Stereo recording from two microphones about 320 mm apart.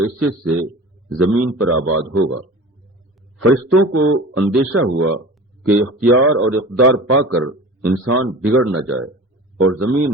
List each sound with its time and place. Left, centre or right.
0.2 s speech: right